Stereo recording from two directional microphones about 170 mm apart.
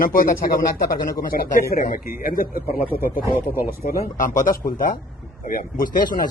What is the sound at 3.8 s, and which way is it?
Speech, 55° left (ahead or behind).